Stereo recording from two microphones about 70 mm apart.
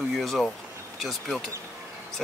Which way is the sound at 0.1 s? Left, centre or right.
Centre.